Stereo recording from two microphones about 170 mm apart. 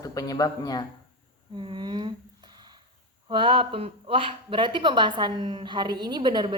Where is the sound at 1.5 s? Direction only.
25° right (ahead or behind).